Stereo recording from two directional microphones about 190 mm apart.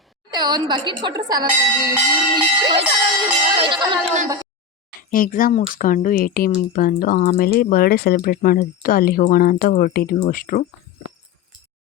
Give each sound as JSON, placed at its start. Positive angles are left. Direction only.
{"t": 0.3, "sound": "a woman's voice", "side_deg": -20}
{"t": 4.9, "sound": "speech", "side_deg": 45}